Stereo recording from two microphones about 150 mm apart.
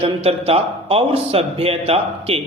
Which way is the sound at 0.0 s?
40° right (ahead or behind).